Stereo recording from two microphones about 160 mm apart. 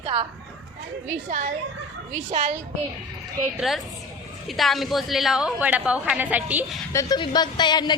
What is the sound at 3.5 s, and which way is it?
A woman's voice, centre (ahead or behind).